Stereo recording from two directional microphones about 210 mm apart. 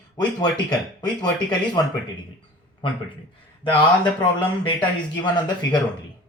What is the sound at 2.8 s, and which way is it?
Speech, 25° left (ahead or behind).